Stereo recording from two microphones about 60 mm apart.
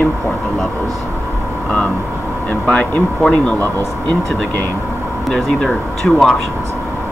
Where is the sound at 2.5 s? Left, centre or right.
Left.